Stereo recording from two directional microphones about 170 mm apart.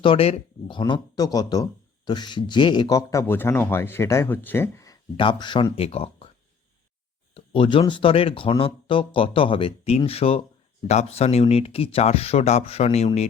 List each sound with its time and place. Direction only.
0.0 s speech: 35° left (ahead or behind)
7.3 s speech: 30° left (ahead or behind)